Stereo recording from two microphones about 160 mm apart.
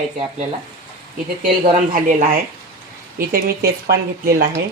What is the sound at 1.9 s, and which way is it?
Speech, 60° right (ahead or behind).